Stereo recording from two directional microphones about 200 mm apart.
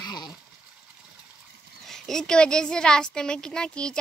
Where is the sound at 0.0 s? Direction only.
20° left (ahead or behind).